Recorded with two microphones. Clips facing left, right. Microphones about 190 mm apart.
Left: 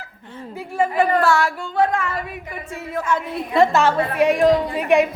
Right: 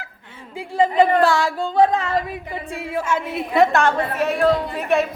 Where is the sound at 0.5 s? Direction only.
15° right (ahead or behind).